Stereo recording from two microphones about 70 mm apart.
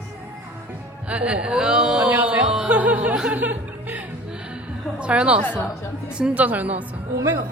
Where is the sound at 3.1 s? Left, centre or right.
Centre.